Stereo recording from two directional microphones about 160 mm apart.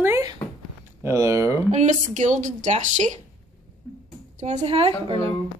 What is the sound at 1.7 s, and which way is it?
Speech, 45° right (ahead or behind).